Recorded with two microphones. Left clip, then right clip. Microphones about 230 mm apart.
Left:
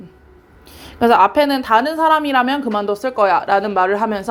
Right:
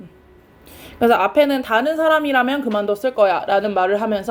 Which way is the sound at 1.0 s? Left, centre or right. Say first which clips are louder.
Left 2 dB; centre.